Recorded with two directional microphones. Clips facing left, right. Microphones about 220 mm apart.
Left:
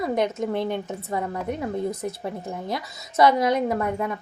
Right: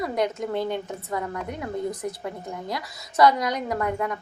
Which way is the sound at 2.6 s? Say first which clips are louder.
Left 2 dB; 25° left (ahead or behind).